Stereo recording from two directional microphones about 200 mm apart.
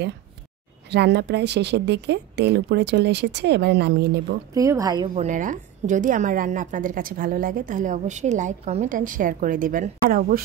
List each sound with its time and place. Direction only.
0.8 s speech: 60° right (ahead or behind)
4.6 s a woman's voice: 15° right (ahead or behind)
5.1 s a woman's voice: 35° right (ahead or behind)